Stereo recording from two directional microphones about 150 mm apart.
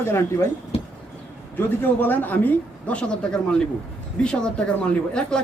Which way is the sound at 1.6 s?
10° left (ahead or behind).